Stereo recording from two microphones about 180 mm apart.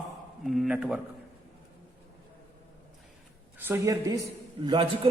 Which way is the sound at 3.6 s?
15° right (ahead or behind).